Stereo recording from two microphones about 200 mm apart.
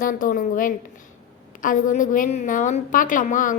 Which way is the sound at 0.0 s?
45° left (ahead or behind).